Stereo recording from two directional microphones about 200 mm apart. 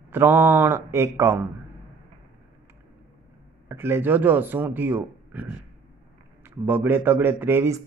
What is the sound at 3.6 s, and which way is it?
Speech, 10° right (ahead or behind).